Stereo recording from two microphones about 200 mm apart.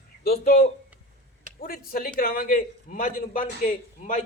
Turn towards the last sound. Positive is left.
turn(degrees=40)  # may be behind; listen again after turning